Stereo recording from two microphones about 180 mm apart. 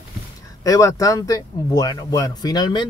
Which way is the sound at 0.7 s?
20° left (ahead or behind).